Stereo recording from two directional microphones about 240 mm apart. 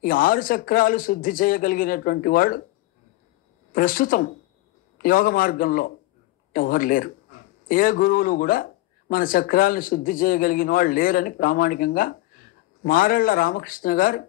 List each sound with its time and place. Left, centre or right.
0.0 s a man's voice: left
3.7 s a man's voice: left